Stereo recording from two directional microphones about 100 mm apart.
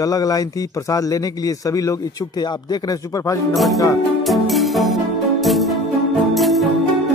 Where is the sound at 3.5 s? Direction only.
Centre (ahead or behind).